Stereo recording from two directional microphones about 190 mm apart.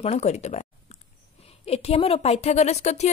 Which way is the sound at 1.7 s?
30° left (ahead or behind).